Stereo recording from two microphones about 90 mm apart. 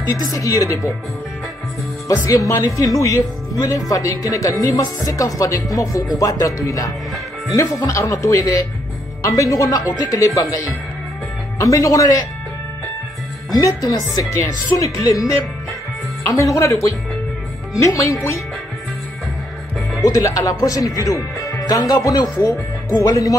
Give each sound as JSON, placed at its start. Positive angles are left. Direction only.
{"t": 0.1, "sound": "speech", "side_deg": 40}
{"t": 2.0, "sound": "speech", "side_deg": 40}
{"t": 13.5, "sound": "speech", "side_deg": 40}
{"t": 20.0, "sound": "speech", "side_deg": 40}